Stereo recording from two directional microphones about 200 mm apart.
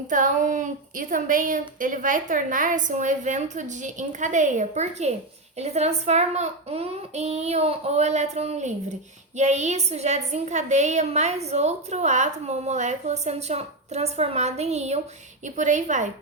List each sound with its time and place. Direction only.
0.1 s a woman's voice: 40° right (ahead or behind)